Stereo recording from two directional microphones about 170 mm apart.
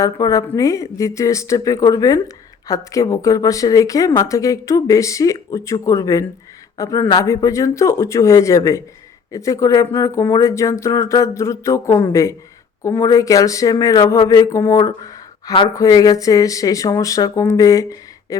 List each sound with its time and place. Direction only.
0.0 s speech: 20° left (ahead or behind)